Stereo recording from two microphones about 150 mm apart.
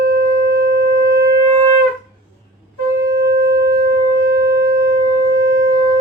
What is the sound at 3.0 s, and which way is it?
Shofar, 90° right.